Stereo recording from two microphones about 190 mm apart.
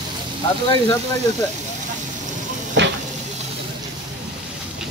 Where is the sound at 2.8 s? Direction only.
70° right (ahead or behind).